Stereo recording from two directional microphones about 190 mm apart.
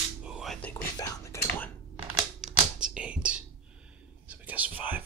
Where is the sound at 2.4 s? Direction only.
5° right (ahead or behind).